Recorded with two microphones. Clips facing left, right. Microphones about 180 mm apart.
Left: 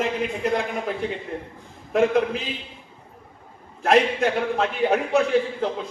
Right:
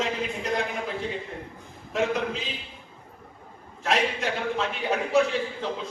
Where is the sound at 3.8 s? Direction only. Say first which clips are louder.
Left 7 dB; 55° left (ahead or behind).